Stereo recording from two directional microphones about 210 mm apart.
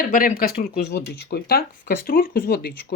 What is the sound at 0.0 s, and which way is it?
Speech, 40° left (ahead or behind).